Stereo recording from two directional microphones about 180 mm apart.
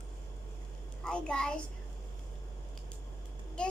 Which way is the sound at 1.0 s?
5° left (ahead or behind).